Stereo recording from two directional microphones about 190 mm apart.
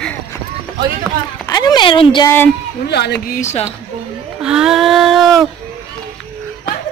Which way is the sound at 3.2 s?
40° left (ahead or behind).